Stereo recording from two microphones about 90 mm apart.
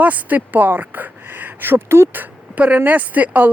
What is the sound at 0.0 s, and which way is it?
Speech, 20° right (ahead or behind).